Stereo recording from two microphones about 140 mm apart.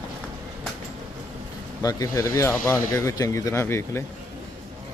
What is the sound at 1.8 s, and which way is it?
Speech, 25° left (ahead or behind).